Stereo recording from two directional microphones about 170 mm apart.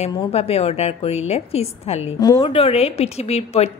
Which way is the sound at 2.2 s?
25° left (ahead or behind).